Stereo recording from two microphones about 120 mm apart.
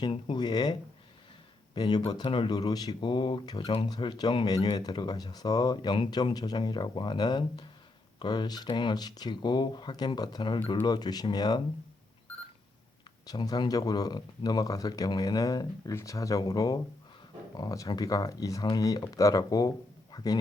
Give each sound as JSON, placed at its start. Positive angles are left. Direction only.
{"t": 0.0, "sound": "speech", "side_deg": 40}
{"t": 13.2, "sound": "speech", "side_deg": 35}